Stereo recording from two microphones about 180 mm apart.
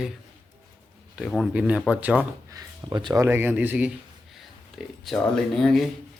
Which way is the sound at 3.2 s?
10° right (ahead or behind).